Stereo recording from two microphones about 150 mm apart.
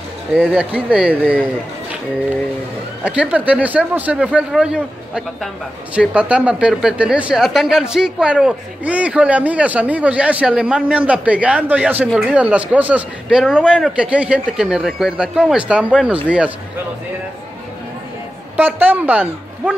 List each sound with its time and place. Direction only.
0.3 s speech: 5° left (ahead or behind)
0.7 s speech: 5° right (ahead or behind)
1.2 s speech: 10° left (ahead or behind)
3.0 s speech: 10° right (ahead or behind)
18.6 s speech: 15° right (ahead or behind)